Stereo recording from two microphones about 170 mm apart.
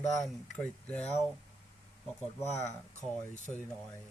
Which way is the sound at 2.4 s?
40° left (ahead or behind).